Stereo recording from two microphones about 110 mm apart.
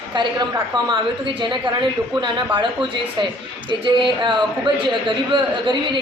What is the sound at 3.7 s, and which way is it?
Speech, 45° right (ahead or behind).